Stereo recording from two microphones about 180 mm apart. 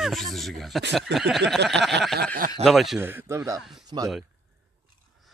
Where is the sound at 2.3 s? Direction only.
50° right (ahead or behind).